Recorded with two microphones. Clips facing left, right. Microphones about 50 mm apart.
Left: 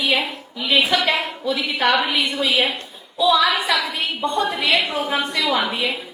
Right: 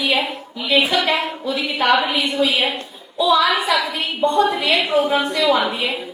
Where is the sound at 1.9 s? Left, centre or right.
Centre.